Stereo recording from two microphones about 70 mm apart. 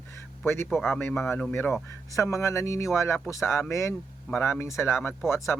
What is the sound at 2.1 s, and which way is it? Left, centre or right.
Speech, left.